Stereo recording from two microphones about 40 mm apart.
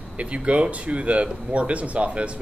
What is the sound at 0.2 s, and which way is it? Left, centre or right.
Speech, right.